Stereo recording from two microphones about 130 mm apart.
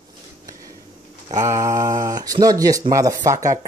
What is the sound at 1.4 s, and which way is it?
Speech, 25° right (ahead or behind).